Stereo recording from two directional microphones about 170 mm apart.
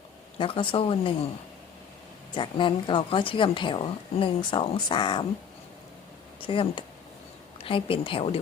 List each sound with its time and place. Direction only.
0.3 s speech: 30° left (ahead or behind)
2.3 s a woman's voice: 30° left (ahead or behind)
6.4 s speech: 30° left (ahead or behind)